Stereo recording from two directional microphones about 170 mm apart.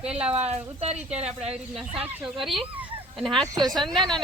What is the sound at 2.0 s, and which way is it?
Speech, 5° right (ahead or behind).